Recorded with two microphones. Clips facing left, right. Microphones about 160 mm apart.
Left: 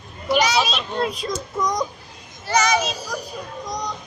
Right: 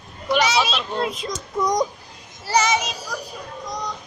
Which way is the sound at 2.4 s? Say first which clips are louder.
Even; 30° right (ahead or behind).